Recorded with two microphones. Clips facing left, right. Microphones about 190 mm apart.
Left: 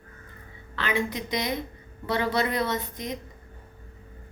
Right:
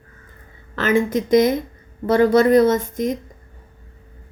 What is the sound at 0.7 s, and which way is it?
A woman's voice, 45° right (ahead or behind).